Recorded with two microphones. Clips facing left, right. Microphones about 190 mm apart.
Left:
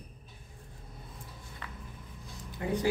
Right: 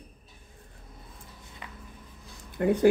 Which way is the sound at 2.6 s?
60° right (ahead or behind).